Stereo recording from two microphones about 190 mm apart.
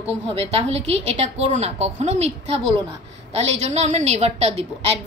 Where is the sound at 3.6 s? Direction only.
35° right (ahead or behind).